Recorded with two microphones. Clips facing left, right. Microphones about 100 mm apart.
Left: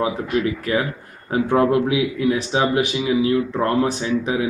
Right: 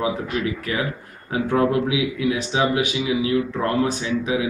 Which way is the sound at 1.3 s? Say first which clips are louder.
Left 3 dB; 35° left (ahead or behind).